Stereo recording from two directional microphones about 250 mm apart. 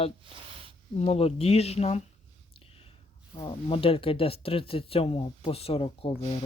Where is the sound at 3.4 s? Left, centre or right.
Left.